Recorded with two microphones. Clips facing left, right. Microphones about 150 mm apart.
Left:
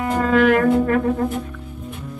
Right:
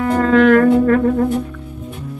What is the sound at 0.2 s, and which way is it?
Music, 10° left (ahead or behind).